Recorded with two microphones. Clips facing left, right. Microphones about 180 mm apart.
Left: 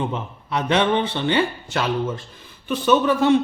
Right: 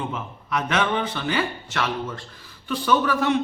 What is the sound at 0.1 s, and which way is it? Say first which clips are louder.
Speech: left 2 dB; 30° left (ahead or behind).